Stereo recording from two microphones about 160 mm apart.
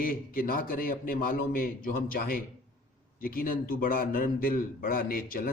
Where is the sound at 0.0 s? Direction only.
65° left (ahead or behind).